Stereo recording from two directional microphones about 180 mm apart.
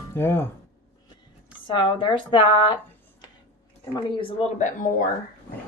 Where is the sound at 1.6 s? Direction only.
30° left (ahead or behind).